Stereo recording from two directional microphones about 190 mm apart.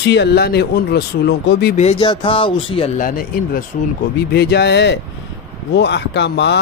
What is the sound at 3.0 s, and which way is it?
Speech, 50° left (ahead or behind).